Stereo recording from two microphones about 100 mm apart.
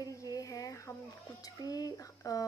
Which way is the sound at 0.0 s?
40° left (ahead or behind).